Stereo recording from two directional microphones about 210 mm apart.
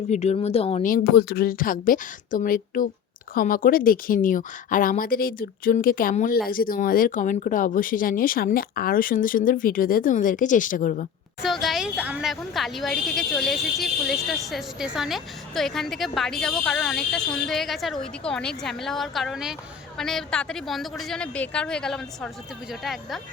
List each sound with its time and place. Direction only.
0.1 s a woman's voice: 30° left (ahead or behind)
11.4 s a woman's voice: centre (ahead or behind)